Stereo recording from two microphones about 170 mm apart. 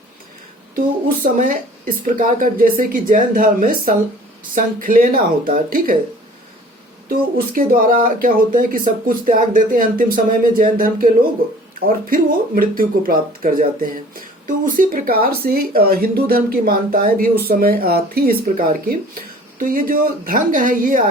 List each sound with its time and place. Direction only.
1.2 s a woman's voice: 50° right (ahead or behind)
7.1 s speech: 55° right (ahead or behind)